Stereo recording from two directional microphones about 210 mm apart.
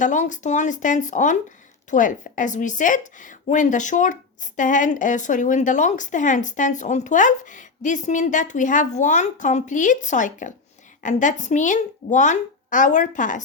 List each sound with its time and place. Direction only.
0.0 s a woman's voice: 35° left (ahead or behind)